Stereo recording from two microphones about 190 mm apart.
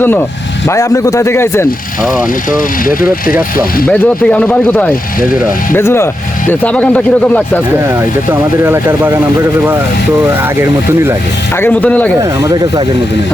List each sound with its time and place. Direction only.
0.7 s speech: 15° left (ahead or behind)
2.0 s speech: centre (ahead or behind)
2.5 s speech: 45° left (ahead or behind)
3.8 s speech: 10° left (ahead or behind)
7.9 s speech: 10° right (ahead or behind)
10.2 s speech: 10° right (ahead or behind)
11.5 s speech: 10° left (ahead or behind)
12.2 s speech: 20° right (ahead or behind)